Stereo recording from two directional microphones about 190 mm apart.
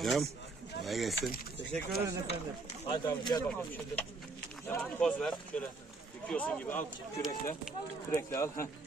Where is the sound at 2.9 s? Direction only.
25° left (ahead or behind).